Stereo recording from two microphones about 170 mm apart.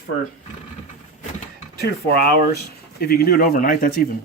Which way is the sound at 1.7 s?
70° left (ahead or behind).